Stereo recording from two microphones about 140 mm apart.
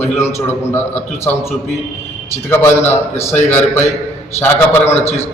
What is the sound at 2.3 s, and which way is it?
Speech, 15° left (ahead or behind).